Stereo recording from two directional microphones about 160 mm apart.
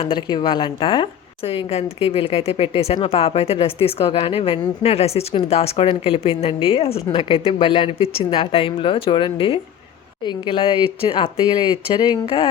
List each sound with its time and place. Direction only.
0.0 s a woman's voice: 30° left (ahead or behind)